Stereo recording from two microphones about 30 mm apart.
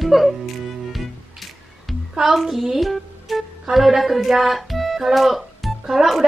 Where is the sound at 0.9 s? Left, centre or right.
Centre.